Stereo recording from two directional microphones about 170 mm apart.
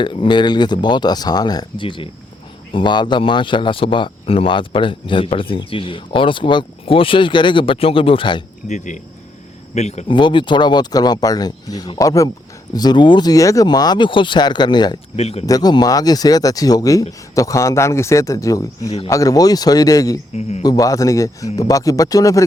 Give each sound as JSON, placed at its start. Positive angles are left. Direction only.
{"t": 0.0, "sound": "speech", "side_deg": 25}
{"t": 8.6, "sound": "speech", "side_deg": 45}
{"t": 10.1, "sound": "speech", "side_deg": 30}
{"t": 15.1, "sound": "speech", "side_deg": 35}
{"t": 15.4, "sound": "speech", "side_deg": 20}